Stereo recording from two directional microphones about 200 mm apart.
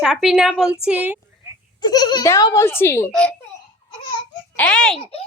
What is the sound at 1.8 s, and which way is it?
Speech, 20° left (ahead or behind).